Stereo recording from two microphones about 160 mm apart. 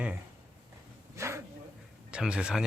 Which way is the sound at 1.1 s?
15° right (ahead or behind).